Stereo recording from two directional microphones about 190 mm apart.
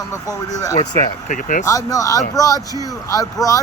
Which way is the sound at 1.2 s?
40° left (ahead or behind).